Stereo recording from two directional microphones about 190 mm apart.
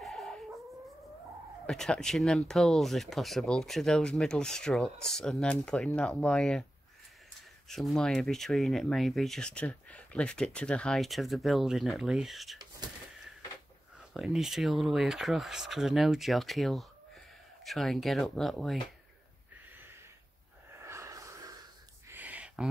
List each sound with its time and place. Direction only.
0.0 s dog: centre (ahead or behind)
1.7 s speech: 5° left (ahead or behind)
7.6 s speech: centre (ahead or behind)
14.1 s speech: centre (ahead or behind)
20.7 s snort: 15° right (ahead or behind)
22.1 s a sound: 10° right (ahead or behind)